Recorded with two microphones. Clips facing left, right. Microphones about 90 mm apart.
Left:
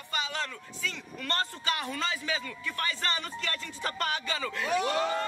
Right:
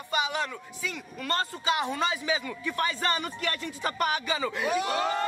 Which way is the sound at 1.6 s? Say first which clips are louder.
Right 5 dB; 20° right (ahead or behind).